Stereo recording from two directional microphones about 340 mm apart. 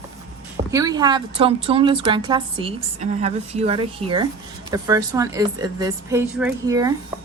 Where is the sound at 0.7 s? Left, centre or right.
Centre.